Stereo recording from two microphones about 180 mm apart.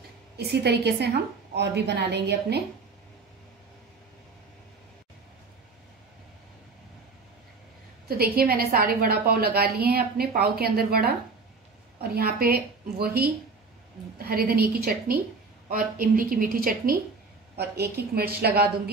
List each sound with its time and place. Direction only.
0.4 s a woman's voice: 65° right (ahead or behind)
8.1 s a woman's voice: 60° right (ahead or behind)